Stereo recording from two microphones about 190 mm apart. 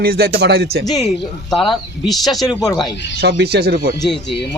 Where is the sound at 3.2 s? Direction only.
55° right (ahead or behind).